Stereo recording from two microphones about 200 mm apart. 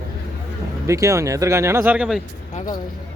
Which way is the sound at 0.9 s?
15° right (ahead or behind).